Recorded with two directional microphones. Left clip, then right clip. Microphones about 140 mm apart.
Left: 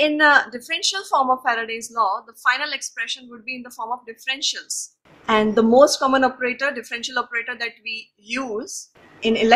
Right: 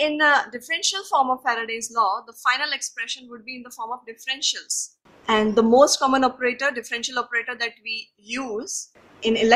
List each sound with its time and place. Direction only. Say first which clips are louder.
0.0 s a woman's voice: left 3 dB; 15° left (ahead or behind)